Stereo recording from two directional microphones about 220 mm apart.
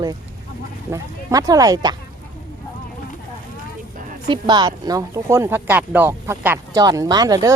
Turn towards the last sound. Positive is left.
turn(degrees=-15)  # may be behind; listen again after turning